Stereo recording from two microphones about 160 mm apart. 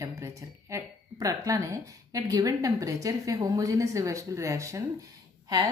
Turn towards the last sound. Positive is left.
turn(degrees=-25)  # may be behind; listen again after turning